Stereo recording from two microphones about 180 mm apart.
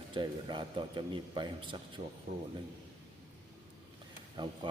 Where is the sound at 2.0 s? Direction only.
35° right (ahead or behind).